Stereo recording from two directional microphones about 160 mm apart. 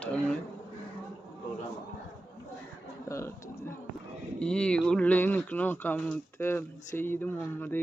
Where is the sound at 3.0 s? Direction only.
15° left (ahead or behind).